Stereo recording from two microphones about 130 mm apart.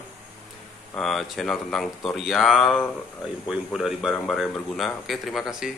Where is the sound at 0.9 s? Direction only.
Centre (ahead or behind).